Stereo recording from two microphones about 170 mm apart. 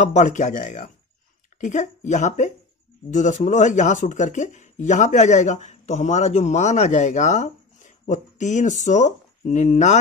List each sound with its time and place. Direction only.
0.0 s speech: 45° left (ahead or behind)